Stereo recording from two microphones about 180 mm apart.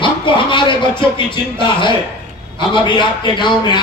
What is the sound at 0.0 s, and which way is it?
A man's voice, 25° left (ahead or behind).